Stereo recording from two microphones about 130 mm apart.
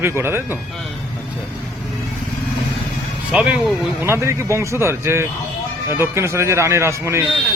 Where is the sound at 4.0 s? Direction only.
20° right (ahead or behind).